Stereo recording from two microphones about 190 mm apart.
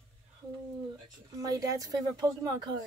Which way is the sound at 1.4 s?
20° right (ahead or behind).